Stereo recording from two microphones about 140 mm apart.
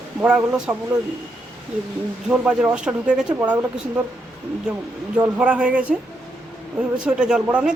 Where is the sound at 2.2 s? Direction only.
10° right (ahead or behind).